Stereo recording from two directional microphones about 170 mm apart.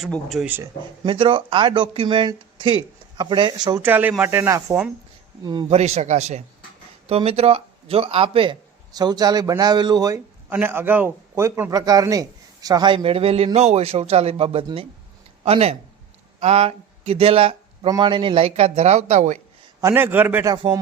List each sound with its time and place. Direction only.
0.0 s speech: centre (ahead or behind)
1.0 s speech: 30° right (ahead or behind)
3.8 s a man's voice: 10° right (ahead or behind)
5.4 s speech: 25° right (ahead or behind)
5.7 s a man's voice: 40° right (ahead or behind)
19.8 s a man's voice: 15° right (ahead or behind)